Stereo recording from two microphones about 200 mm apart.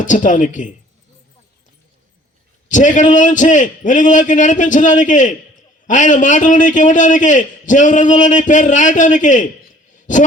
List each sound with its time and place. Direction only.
0.0 s a man's voice: 40° left (ahead or behind)
2.6 s a man's voice: 40° left (ahead or behind)